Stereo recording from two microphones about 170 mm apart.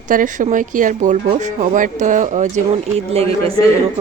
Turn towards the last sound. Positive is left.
turn(degrees=-35)  # may be behind; listen again after turning